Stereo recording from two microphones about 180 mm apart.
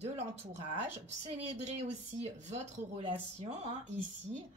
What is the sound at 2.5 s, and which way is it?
A woman's voice, 40° right (ahead or behind).